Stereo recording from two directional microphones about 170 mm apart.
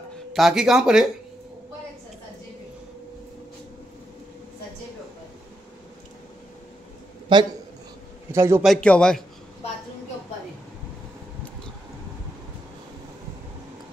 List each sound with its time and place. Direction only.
0.3 s a man's voice: centre (ahead or behind)
7.3 s a man's voice: 25° right (ahead or behind)
8.3 s a man's voice: 15° right (ahead or behind)
8.6 s a man's voice: 5° left (ahead or behind)